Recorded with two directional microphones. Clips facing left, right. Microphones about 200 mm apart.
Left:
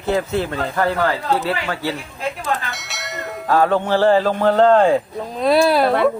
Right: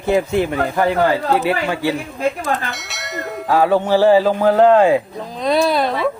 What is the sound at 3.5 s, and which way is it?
Speech, 10° right (ahead or behind).